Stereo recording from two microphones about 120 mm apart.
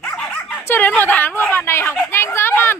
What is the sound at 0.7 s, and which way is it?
Speech, 15° left (ahead or behind).